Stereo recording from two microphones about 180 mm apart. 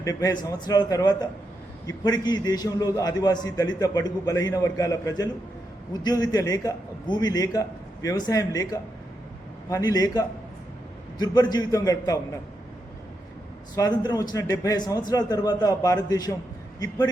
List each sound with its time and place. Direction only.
0.0 s a man's voice: 20° left (ahead or behind)
13.7 s a man's voice: 20° left (ahead or behind)